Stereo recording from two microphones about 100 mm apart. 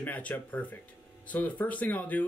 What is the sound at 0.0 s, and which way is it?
Speech, 15° left (ahead or behind).